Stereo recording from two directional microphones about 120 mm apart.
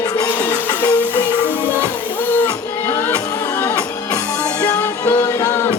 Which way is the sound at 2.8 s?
20° left (ahead or behind).